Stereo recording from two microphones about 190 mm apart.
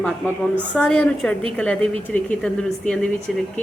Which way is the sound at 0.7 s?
5° left (ahead or behind).